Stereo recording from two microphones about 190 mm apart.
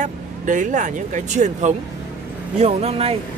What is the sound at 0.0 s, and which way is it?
Speech, 40° right (ahead or behind).